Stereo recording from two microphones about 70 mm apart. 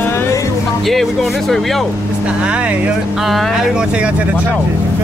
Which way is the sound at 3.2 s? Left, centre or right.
Centre.